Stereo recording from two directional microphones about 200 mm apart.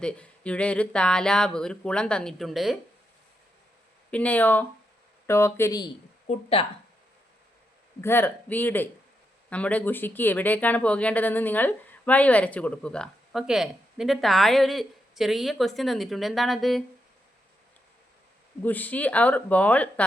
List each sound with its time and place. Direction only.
0.0 s speech: 5° left (ahead or behind)
4.1 s speech: 5° left (ahead or behind)
6.2 s speech: 30° left (ahead or behind)
8.0 s speech: 10° left (ahead or behind)
18.6 s speech: 10° left (ahead or behind)